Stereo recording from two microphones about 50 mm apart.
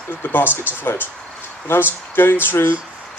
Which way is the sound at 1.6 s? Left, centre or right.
Left.